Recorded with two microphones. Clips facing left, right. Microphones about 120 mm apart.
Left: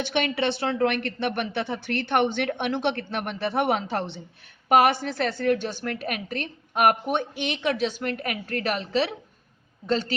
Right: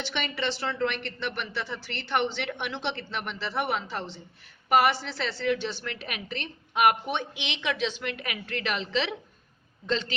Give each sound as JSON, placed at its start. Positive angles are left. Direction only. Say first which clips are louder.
{"t": 0.0, "sound": "a woman's voice", "louder": "left 6 dB", "side_deg": 55}